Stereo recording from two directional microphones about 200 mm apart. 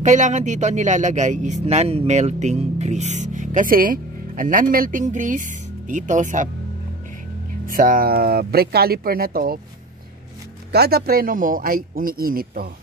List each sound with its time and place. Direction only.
0.0 s speech: 35° right (ahead or behind)
7.6 s speech: 45° right (ahead or behind)
10.7 s speech: 50° right (ahead or behind)